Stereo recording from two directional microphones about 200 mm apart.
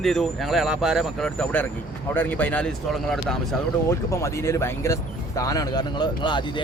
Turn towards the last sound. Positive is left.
turn(degrees=20)  # may be behind; listen again after turning